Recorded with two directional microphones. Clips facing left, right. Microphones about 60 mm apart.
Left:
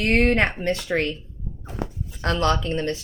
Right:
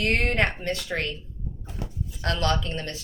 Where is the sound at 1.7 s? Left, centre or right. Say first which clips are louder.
Left 6 dB; left.